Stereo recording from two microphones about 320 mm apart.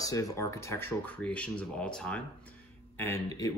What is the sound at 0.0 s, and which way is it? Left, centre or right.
A man's voice, centre.